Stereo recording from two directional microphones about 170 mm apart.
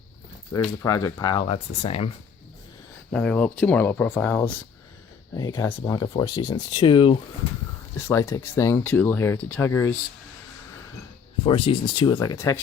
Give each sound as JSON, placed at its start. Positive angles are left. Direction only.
{"t": 0.6, "sound": "speech", "side_deg": 20}
{"t": 3.1, "sound": "speech", "side_deg": 5}
{"t": 5.3, "sound": "speech", "side_deg": 20}
{"t": 7.9, "sound": "speech", "side_deg": 15}
{"t": 11.4, "sound": "speech", "side_deg": 35}